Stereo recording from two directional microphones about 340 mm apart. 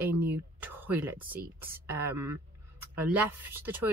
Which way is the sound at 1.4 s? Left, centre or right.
Right.